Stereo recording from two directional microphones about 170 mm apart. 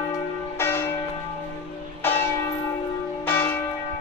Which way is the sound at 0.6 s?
15° left (ahead or behind).